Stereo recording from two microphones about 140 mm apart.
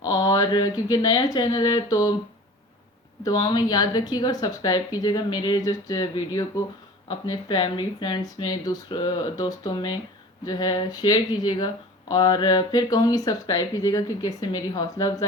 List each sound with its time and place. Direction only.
0.0 s speech: 25° left (ahead or behind)
3.2 s speech: 30° left (ahead or behind)